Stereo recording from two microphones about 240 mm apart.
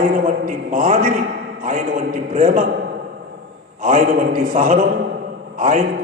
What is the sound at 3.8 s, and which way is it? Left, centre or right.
A man's voice, right.